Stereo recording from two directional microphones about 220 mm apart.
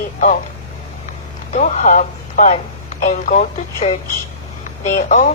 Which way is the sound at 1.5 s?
35° left (ahead or behind).